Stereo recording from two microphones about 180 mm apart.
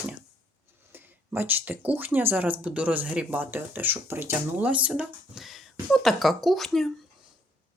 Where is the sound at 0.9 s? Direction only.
10° right (ahead or behind).